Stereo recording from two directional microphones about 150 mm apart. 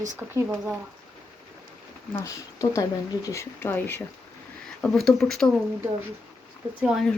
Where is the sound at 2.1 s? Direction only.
20° left (ahead or behind).